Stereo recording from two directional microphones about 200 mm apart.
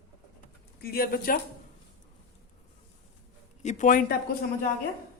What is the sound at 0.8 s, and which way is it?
Speech, 50° left (ahead or behind).